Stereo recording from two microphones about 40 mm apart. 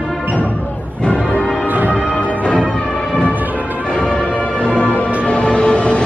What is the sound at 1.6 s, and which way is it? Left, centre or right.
Music, right.